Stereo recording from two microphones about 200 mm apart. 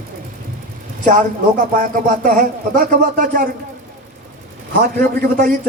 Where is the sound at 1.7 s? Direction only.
40° right (ahead or behind).